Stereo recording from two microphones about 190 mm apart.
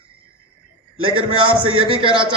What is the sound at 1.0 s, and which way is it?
A man's voice, 25° right (ahead or behind).